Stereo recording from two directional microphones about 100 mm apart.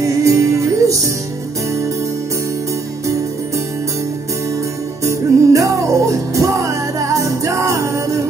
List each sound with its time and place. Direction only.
0.0 s music: 30° right (ahead or behind)
5.0 s music: 30° right (ahead or behind)